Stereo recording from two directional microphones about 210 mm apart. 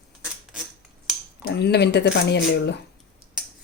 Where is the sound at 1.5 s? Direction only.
50° left (ahead or behind).